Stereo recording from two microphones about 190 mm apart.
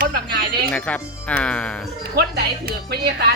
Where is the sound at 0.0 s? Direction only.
55° right (ahead or behind).